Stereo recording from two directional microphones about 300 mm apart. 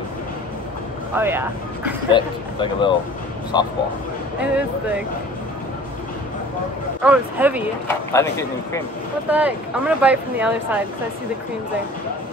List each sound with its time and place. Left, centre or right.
1.1 s speech: centre
2.1 s speech: centre
4.4 s speech: centre
7.0 s speech: centre
8.1 s speech: centre
9.3 s speech: centre